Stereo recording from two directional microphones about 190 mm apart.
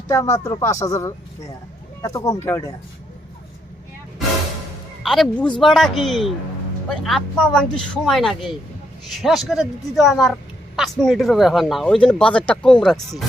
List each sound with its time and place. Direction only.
0.1 s speech: 15° left (ahead or behind)
5.0 s speech: centre (ahead or behind)